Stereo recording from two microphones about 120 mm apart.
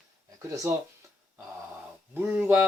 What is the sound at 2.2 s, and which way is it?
Speech, 15° right (ahead or behind).